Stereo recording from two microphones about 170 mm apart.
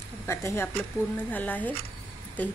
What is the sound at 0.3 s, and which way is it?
Speech, 15° left (ahead or behind).